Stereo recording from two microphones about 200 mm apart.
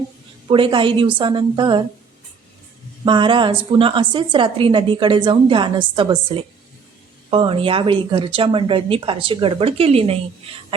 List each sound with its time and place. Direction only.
0.4 s speech: 25° right (ahead or behind)
3.0 s speech: 25° right (ahead or behind)